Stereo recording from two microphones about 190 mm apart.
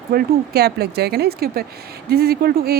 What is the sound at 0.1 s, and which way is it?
Speech, 55° right (ahead or behind).